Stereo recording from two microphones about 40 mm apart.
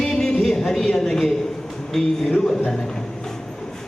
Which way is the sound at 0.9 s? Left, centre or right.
Centre.